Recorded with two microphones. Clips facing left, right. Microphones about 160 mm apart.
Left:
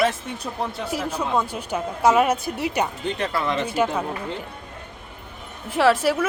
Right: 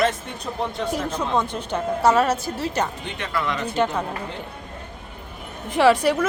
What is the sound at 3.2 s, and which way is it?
Speech, 30° left (ahead or behind).